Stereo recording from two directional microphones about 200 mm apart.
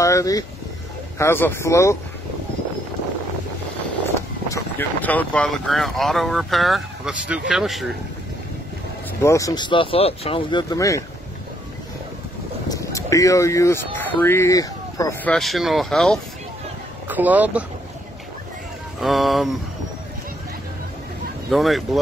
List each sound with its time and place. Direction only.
0.0 s speech: 15° left (ahead or behind)
4.5 s speech: 10° left (ahead or behind)
9.2 s speech: 15° left (ahead or behind)
12.6 s a sound: 15° left (ahead or behind)
13.9 s speech: 10° left (ahead or behind)
15.3 s speech: centre (ahead or behind)
18.9 s speech: centre (ahead or behind)
21.5 s speech: centre (ahead or behind)